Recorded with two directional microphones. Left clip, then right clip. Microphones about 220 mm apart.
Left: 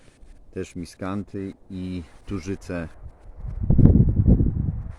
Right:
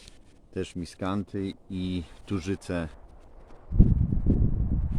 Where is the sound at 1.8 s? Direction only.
45° right (ahead or behind).